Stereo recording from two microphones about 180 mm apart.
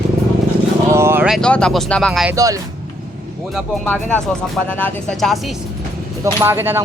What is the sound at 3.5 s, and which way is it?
Speech, 10° left (ahead or behind).